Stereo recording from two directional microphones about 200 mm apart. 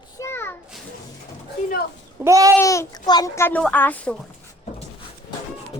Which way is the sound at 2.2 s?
15° right (ahead or behind).